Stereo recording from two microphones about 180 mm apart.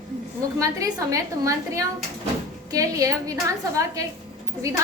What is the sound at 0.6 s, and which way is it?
A woman's voice, 20° right (ahead or behind).